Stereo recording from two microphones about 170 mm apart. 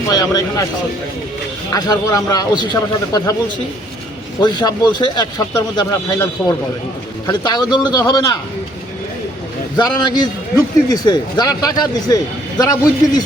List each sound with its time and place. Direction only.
0.1 s a man's voice: 20° left (ahead or behind)
1.7 s a man's voice: 20° left (ahead or behind)
4.4 s a man's voice: 25° left (ahead or behind)
7.3 s a man's voice: 25° left (ahead or behind)
9.7 s a man's voice: 25° left (ahead or behind)